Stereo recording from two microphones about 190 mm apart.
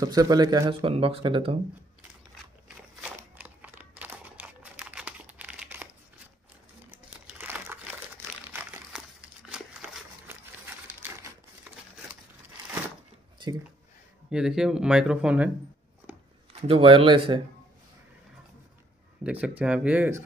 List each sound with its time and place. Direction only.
0.0 s speech: 20° right (ahead or behind)
3.0 s a sound: 10° right (ahead or behind)
4.0 s crumpling: 10° right (ahead or behind)
6.9 s crumpling: 10° right (ahead or behind)
8.5 s a sound: 10° right (ahead or behind)
9.5 s crumpling: 10° right (ahead or behind)
14.3 s speech: 5° right (ahead or behind)
16.6 s speech: 30° right (ahead or behind)
19.4 s speech: 5° right (ahead or behind)